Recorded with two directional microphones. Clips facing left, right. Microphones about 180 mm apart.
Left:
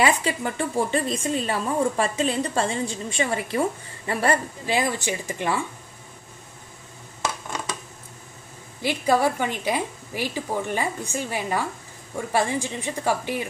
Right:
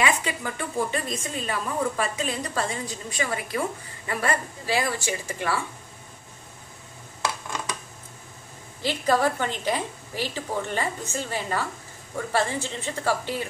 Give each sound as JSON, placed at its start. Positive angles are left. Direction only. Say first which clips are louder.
{"t": 0.0, "sound": "a woman's voice", "louder": "left 4 dB", "side_deg": 30}
{"t": 4.6, "sound": "a woman's voice", "louder": "left 2 dB", "side_deg": 20}
{"t": 8.8, "sound": "a woman's voice", "louder": "left 2 dB", "side_deg": 10}